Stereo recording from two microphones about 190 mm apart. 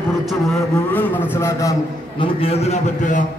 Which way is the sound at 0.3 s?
5° left (ahead or behind).